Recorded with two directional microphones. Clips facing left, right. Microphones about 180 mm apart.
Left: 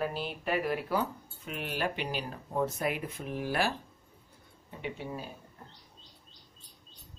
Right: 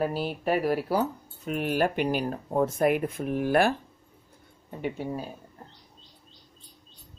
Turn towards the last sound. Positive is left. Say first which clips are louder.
# right 7 dB
turn(degrees=-45)  # may be behind; listen again after turning